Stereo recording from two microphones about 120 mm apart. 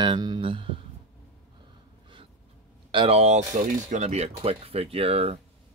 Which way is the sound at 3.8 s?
75° right (ahead or behind).